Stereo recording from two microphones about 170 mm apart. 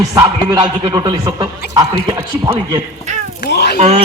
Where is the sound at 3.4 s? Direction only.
75° left (ahead or behind).